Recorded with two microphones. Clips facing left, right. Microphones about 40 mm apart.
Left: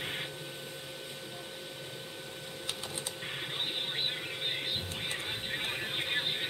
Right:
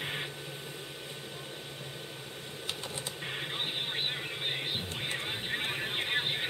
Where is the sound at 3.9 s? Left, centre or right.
Centre.